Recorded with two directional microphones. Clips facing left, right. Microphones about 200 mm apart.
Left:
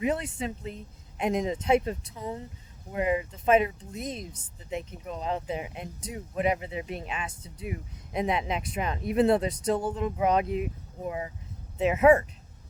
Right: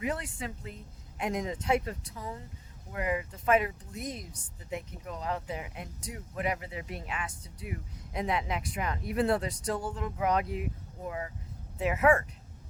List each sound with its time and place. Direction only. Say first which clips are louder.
0.0 s speech: left 6 dB; 20° left (ahead or behind)